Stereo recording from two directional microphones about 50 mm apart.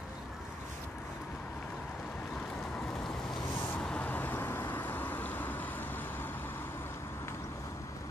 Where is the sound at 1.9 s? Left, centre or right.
Left.